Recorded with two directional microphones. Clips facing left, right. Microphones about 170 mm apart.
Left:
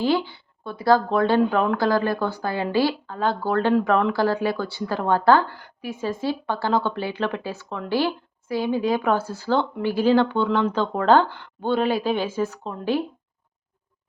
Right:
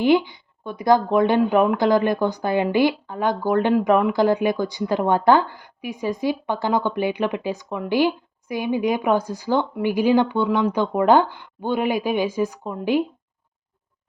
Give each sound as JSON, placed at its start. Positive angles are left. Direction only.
{"t": 0.0, "sound": "speech", "side_deg": -15}